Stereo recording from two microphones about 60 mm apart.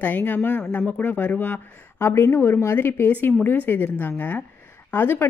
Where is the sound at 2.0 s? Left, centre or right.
Left.